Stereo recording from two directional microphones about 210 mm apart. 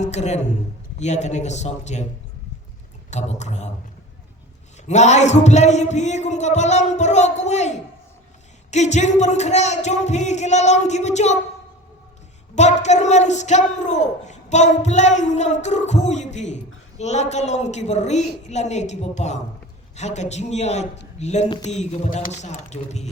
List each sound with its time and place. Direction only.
0.0 s a man's voice: 30° left (ahead or behind)
3.1 s speech: 35° left (ahead or behind)
4.9 s speech: 35° left (ahead or behind)
12.5 s speech: 35° left (ahead or behind)